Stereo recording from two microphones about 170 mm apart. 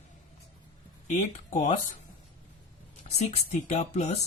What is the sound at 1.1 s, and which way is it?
Speech, 45° left (ahead or behind).